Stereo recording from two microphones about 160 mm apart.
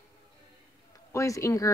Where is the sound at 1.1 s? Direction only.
20° left (ahead or behind).